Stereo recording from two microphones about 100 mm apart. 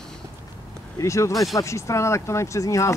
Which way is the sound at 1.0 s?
30° left (ahead or behind).